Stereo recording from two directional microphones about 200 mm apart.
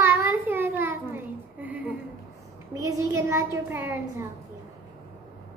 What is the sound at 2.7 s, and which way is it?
A child's voice, 15° right (ahead or behind).